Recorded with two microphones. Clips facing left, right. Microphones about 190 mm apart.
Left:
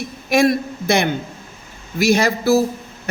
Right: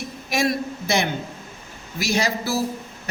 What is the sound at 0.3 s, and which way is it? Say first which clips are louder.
A man's voice: left 7 dB; 55° left (ahead or behind).